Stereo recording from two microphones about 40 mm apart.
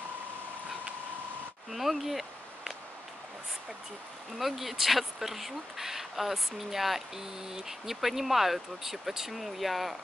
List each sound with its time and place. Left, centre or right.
1.7 s speech: centre
4.4 s speech: centre